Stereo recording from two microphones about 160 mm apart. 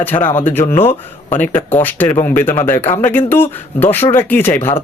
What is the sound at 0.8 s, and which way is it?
Speech, 40° left (ahead or behind).